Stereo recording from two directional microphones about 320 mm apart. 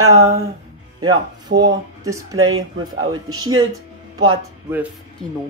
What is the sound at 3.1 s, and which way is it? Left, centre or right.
Speech, centre.